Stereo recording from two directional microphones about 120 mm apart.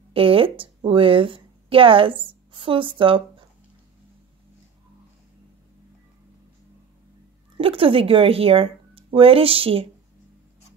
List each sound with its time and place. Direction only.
0.1 s a woman's voice: 50° right (ahead or behind)
7.5 s speech: 50° right (ahead or behind)